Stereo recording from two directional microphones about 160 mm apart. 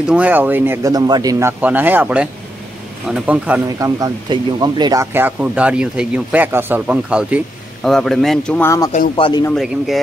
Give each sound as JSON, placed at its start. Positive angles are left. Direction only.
{"t": 0.1, "sound": "speech", "side_deg": -10}
{"t": 1.6, "sound": "speech", "side_deg": -10}
{"t": 3.6, "sound": "speech", "side_deg": -20}
{"t": 7.8, "sound": "speech", "side_deg": 0}
{"t": 8.6, "sound": "speech", "side_deg": 20}
{"t": 9.1, "sound": "speech", "side_deg": 30}